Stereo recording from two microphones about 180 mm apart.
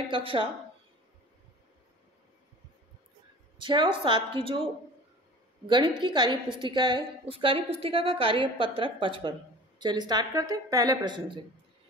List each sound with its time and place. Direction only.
0.1 s a woman's voice: 30° right (ahead or behind)
3.5 s a woman's voice: 25° right (ahead or behind)
5.7 s a woman's voice: 25° right (ahead or behind)